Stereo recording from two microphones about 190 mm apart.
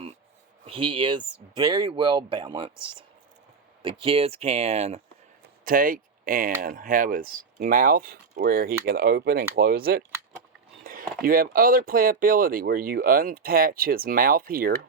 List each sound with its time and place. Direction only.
0.6 s speech: 30° right (ahead or behind)
3.8 s speech: 30° right (ahead or behind)
5.6 s speech: 45° right (ahead or behind)